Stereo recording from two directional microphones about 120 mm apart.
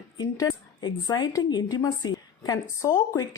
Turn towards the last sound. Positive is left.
turn(degrees=30)  # may be behind; listen again after turning